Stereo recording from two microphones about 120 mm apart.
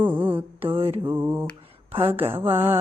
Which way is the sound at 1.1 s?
20° right (ahead or behind).